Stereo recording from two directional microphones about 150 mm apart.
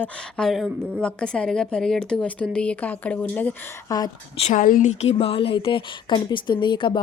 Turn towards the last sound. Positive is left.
turn(degrees=30)  # may be behind; listen again after turning